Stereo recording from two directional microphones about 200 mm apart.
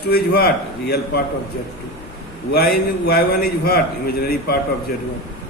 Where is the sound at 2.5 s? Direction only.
50° left (ahead or behind).